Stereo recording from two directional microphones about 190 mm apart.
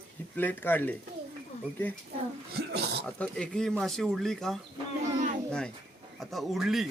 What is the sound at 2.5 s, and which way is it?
Speech, 60° right (ahead or behind).